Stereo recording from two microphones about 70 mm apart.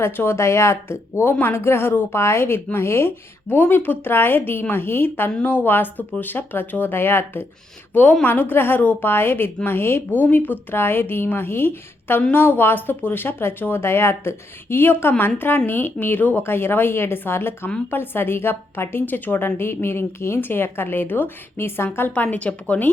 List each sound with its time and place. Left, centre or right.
0.0 s a woman's voice: left
22.1 s speech: left